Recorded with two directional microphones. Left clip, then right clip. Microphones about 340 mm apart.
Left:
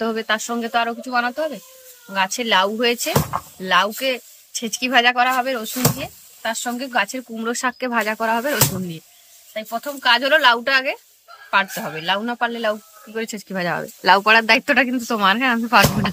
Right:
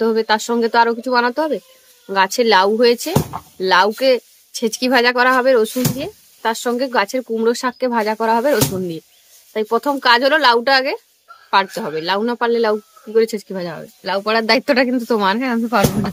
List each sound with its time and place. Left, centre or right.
0.0 s speech: centre
3.1 s speech: left
3.6 s speech: centre